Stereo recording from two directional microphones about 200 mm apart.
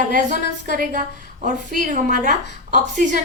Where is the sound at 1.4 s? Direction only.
40° right (ahead or behind).